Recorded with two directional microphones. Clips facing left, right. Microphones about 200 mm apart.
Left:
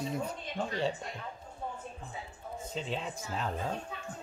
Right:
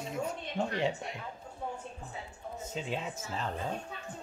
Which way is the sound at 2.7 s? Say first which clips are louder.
Even; 5° right (ahead or behind).